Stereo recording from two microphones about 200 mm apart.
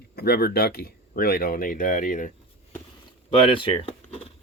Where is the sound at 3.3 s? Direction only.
25° left (ahead or behind).